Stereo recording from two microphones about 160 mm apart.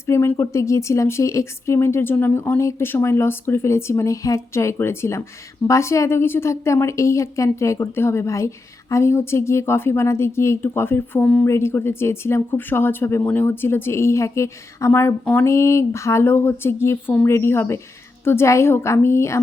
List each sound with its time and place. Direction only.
0.0 s a woman's voice: 15° left (ahead or behind)